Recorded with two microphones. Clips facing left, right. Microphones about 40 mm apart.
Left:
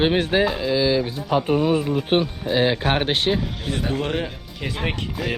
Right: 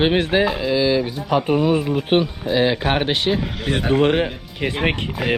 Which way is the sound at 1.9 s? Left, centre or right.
Right.